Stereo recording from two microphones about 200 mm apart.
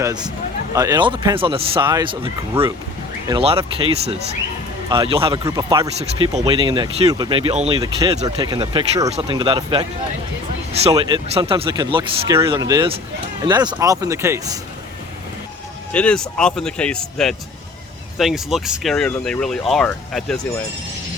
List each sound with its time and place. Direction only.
0.0 s speech: 20° right (ahead or behind)
10.9 s speech: 25° right (ahead or behind)
15.9 s speech: 5° left (ahead or behind)